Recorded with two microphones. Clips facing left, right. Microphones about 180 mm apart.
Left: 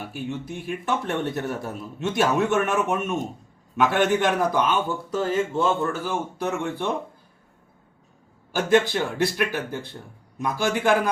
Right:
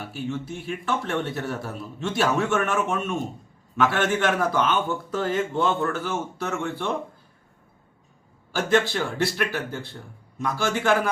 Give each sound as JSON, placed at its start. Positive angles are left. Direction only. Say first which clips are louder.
{"t": 0.0, "sound": "speech", "louder": "right 1 dB", "side_deg": 15}
{"t": 8.5, "sound": "speech", "louder": "left 2 dB", "side_deg": 15}